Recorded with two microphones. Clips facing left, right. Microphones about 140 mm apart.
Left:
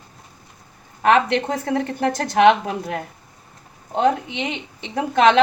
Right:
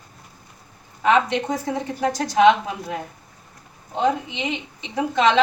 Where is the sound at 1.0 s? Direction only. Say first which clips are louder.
Left 2 dB; 60° left (ahead or behind).